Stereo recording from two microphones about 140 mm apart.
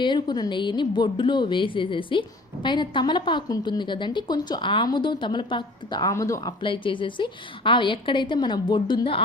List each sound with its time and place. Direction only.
0.0 s a woman's voice: 30° left (ahead or behind)
6.6 s a woman's voice: 35° left (ahead or behind)